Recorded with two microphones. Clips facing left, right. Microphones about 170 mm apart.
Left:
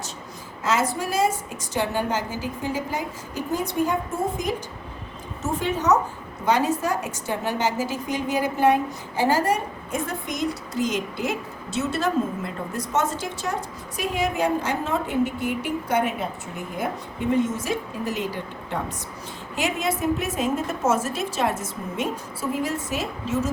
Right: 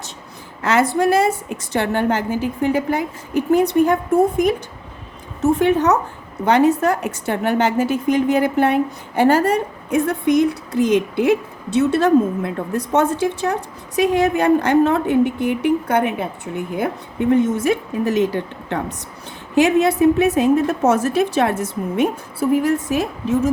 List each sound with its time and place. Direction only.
0.6 s a woman's voice: 65° right (ahead or behind)
5.4 s a woman's voice: 60° right (ahead or behind)
17.3 s a woman's voice: 65° right (ahead or behind)